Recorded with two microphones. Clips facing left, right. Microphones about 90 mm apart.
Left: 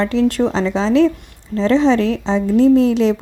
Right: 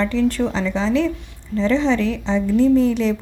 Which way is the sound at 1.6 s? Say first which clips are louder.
Left 5 dB; 90° left.